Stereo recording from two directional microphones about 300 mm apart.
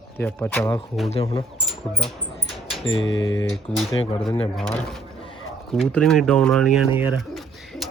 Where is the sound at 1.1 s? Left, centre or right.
Centre.